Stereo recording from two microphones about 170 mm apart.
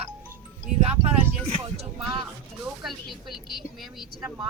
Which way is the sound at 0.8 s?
35° right (ahead or behind).